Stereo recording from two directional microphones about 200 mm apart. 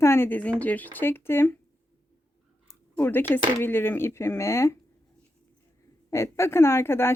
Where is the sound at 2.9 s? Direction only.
10° left (ahead or behind).